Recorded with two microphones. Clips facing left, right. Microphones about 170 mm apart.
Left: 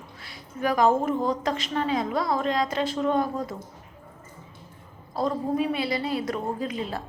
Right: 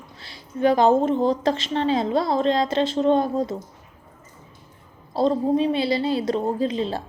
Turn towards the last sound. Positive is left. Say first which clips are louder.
# right 6 dB
turn(degrees=-25)  # may be behind; listen again after turning